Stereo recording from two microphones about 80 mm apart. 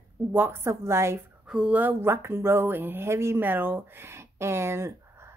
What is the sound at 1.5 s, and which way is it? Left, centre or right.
Speech, centre.